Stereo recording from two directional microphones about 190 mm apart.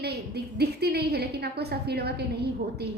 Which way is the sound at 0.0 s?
60° right (ahead or behind).